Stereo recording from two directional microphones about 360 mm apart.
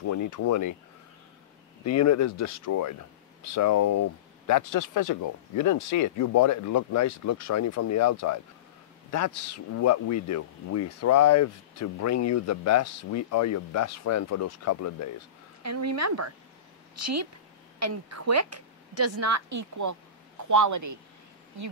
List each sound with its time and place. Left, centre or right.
0.0 s speech: left
1.9 s speech: left
15.6 s a woman's voice: right